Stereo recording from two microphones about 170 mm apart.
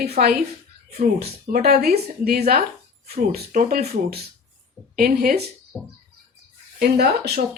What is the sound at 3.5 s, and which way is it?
Speech, 50° right (ahead or behind).